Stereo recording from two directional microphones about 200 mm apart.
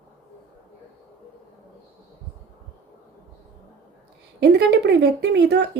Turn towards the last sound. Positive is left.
turn(degrees=-55)  # may be behind; listen again after turning